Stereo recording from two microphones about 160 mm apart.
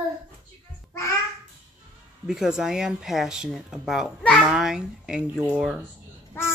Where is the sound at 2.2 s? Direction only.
5° right (ahead or behind).